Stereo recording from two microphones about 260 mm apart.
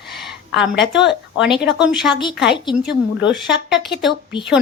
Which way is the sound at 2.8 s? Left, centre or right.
Left.